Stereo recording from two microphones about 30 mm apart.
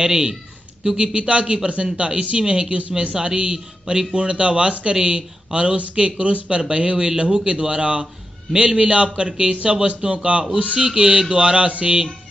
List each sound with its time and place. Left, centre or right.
0.0 s a man's voice: right
3.5 s a man's voice: centre
4.1 s a man's voice: right
6.2 s speech: right
6.7 s a man's voice: right
10.8 s a man's voice: right